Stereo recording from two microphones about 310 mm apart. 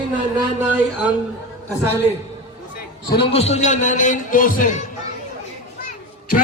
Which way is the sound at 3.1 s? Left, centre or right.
Left.